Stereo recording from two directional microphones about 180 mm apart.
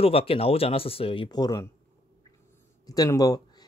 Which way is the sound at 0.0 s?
30° left (ahead or behind).